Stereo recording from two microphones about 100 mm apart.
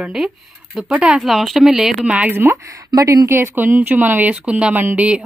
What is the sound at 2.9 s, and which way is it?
A woman's voice, 35° right (ahead or behind).